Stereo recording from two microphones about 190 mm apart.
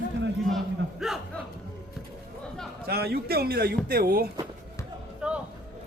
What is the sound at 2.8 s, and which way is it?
Speech, 55° right (ahead or behind).